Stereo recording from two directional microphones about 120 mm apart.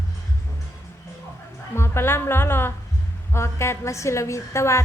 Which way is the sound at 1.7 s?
20° left (ahead or behind).